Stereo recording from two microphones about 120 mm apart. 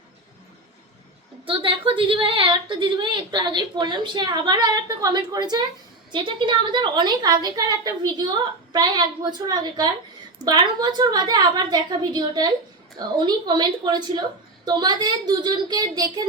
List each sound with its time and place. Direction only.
1.5 s a woman's voice: 45° right (ahead or behind)
8.7 s a woman's voice: 35° right (ahead or behind)